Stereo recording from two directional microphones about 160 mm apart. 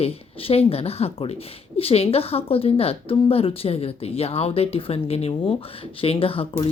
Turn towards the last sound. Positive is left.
turn(degrees=35)  # may be behind; listen again after turning